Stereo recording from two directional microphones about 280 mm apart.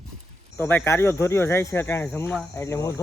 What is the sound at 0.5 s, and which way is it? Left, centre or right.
Speech, centre.